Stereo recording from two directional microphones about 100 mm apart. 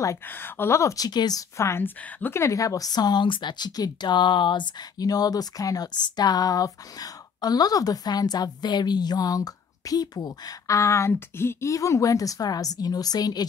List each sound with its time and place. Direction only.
0.3 s speech: 20° left (ahead or behind); by 1.4 s 40° left (ahead or behind)
1.6 s a woman's voice: 25° left (ahead or behind)
2.4 s speech: 35° left (ahead or behind)